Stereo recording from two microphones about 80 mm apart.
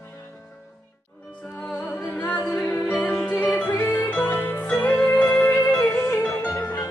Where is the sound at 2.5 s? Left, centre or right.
Left.